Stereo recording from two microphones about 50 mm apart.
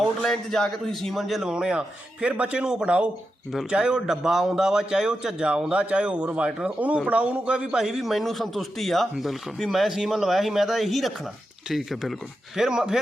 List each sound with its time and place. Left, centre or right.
0.2 s a man's voice: centre
1.1 s a man's voice: centre; by 6.7 s right
6.7 s a man's voice: right; by 13.0 s centre